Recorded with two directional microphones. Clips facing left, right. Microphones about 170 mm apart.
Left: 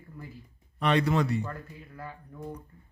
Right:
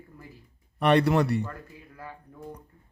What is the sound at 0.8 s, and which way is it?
Speech, 65° right (ahead or behind).